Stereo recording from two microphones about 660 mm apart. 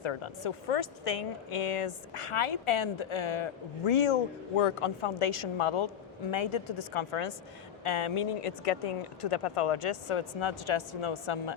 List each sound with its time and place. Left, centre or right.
0.0 s speech: left